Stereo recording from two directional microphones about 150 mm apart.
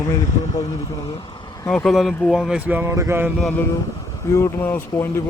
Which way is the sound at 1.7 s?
5° left (ahead or behind).